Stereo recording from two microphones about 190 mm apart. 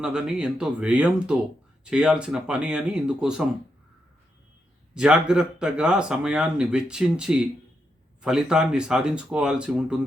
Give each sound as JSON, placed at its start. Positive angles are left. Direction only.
{"t": 0.0, "sound": "speech", "side_deg": -5}
{"t": 4.9, "sound": "speech", "side_deg": -5}